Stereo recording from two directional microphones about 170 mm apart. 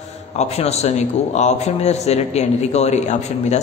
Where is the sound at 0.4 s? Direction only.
40° left (ahead or behind).